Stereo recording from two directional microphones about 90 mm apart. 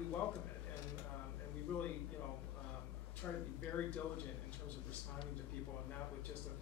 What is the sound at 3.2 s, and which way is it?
Speech, 15° left (ahead or behind).